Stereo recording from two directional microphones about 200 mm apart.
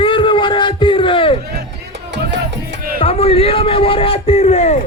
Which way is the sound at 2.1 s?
60° right (ahead or behind).